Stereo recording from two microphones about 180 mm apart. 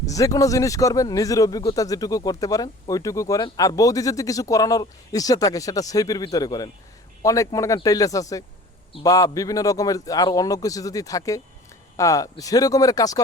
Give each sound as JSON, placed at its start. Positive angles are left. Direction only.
{"t": 0.0, "sound": "speech", "side_deg": 20}